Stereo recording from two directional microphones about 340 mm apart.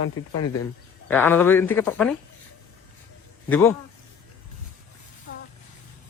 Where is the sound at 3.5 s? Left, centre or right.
Centre.